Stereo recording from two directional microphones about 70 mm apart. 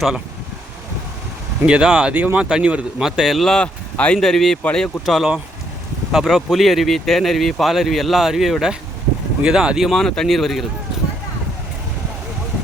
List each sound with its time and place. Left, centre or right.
1.6 s speech: centre
2.1 s speech: right; by 3.7 s centre
3.9 s speech: centre
4.2 s speech: centre
5.0 s speech: centre
10.0 s speech: centre